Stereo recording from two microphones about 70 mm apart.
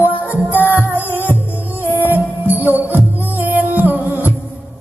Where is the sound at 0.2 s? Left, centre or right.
Left.